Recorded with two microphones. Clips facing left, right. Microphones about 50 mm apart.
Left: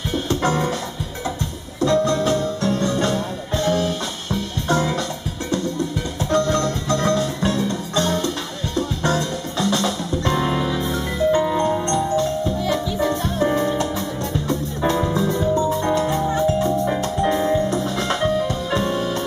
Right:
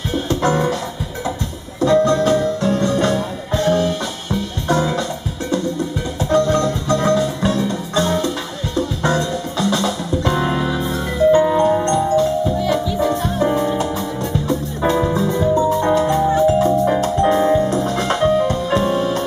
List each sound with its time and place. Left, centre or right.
0.1 s music: centre
1.8 s music: centre
6.3 s music: centre